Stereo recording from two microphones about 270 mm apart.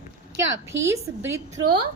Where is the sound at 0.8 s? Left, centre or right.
Centre.